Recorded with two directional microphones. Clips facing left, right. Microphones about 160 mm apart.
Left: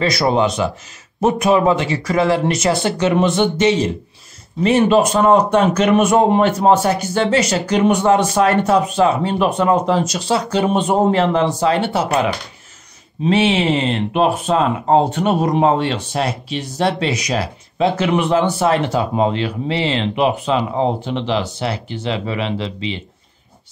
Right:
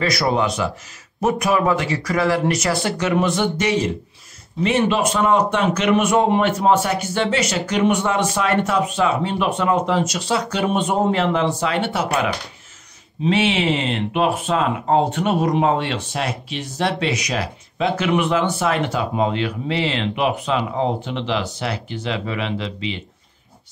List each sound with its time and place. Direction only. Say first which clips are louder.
0.0 s speech: left 3 dB; 25° left (ahead or behind)
4.6 s speech: left 5 dB; 40° left (ahead or behind)
13.2 s speech: left 3 dB; 40° left (ahead or behind)